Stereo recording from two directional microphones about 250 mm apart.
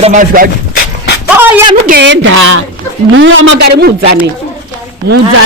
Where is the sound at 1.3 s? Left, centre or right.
Centre.